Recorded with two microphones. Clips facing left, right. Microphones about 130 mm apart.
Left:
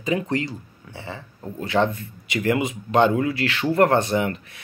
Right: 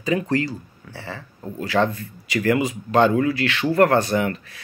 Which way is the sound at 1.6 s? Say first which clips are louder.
Even; 25° left (ahead or behind).